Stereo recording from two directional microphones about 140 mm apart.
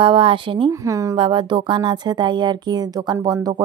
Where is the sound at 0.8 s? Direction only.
25° right (ahead or behind).